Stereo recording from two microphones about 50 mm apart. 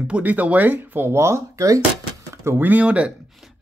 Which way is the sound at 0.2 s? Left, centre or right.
Right.